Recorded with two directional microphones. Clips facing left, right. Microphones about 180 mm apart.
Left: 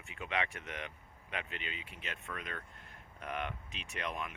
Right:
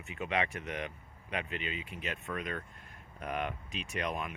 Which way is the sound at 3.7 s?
10° right (ahead or behind).